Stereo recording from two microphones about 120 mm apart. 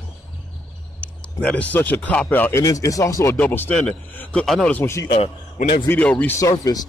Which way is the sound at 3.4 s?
15° left (ahead or behind).